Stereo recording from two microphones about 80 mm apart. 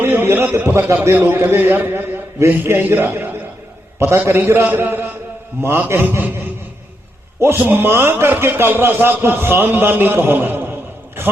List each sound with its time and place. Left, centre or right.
0.0 s a sound: right
1.2 s a man's voice: right
7.3 s a man's voice: right